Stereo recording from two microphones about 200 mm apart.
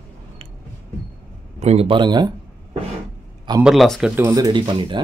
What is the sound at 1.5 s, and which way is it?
Speech, 30° right (ahead or behind).